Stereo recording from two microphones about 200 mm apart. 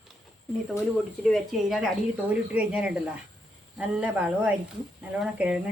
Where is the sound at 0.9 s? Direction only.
Centre (ahead or behind).